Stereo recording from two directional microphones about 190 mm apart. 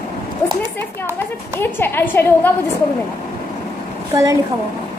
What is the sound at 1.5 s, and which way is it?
Speech, 10° left (ahead or behind).